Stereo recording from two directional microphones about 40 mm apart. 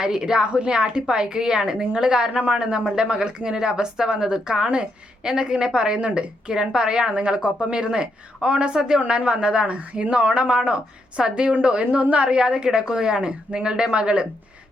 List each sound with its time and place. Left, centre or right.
0.0 s a woman's voice: centre
6.5 s a woman's voice: centre